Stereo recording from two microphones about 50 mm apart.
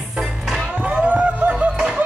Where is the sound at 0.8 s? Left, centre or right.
Right.